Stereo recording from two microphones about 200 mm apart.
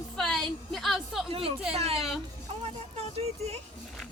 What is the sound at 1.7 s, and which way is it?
Speech, 30° right (ahead or behind).